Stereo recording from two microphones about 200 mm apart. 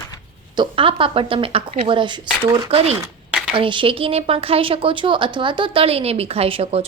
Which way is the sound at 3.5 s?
25° right (ahead or behind).